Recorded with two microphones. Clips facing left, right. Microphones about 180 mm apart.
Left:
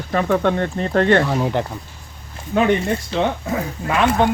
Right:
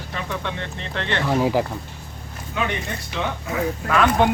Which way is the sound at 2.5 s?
45° left (ahead or behind).